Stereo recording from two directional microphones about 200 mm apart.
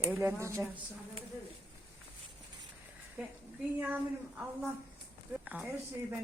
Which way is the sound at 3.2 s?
5° right (ahead or behind).